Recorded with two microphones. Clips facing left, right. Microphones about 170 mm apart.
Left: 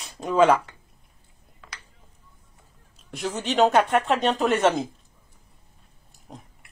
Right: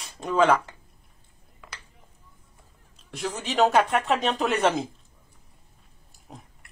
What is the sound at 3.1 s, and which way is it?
Speech, centre (ahead or behind).